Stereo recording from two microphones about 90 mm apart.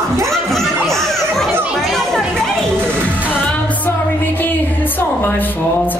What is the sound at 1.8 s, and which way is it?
Music, 5° left (ahead or behind).